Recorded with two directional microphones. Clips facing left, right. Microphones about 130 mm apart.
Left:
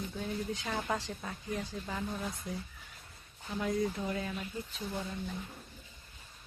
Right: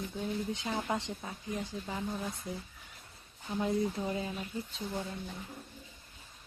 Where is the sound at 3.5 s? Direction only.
25° right (ahead or behind).